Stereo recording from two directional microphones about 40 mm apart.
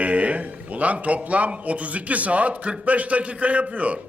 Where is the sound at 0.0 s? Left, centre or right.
Right.